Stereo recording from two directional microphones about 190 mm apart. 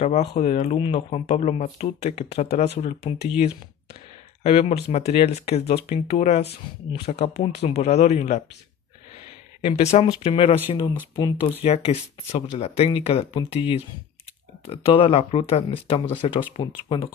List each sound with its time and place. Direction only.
0.4 s speech: 35° left (ahead or behind)
9.7 s speech: 35° left (ahead or behind)